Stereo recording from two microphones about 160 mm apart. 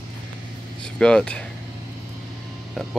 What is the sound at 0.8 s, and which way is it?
Speech, 5° left (ahead or behind).